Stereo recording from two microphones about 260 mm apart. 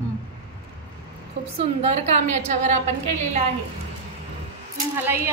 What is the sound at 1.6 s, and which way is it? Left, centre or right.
A woman's voice, right.